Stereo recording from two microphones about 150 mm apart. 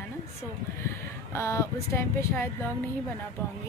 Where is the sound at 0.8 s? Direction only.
20° left (ahead or behind).